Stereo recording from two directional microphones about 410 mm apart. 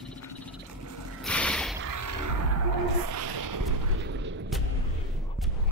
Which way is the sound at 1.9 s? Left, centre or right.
Right.